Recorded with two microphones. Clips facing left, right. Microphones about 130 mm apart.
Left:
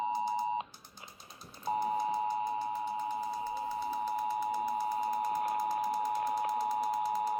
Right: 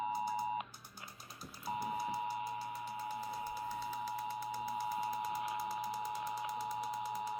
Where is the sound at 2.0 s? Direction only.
40° left (ahead or behind).